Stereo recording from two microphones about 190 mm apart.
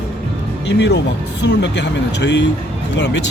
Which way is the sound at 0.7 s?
65° left (ahead or behind).